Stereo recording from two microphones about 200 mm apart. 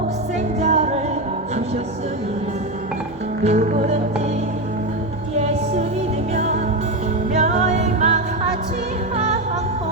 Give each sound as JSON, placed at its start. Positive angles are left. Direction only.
{"t": 0.6, "sound": "music", "side_deg": -35}
{"t": 3.4, "sound": "music", "side_deg": -35}
{"t": 6.3, "sound": "music", "side_deg": -35}